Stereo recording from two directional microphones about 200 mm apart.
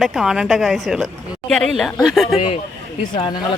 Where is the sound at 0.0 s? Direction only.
Centre (ahead or behind).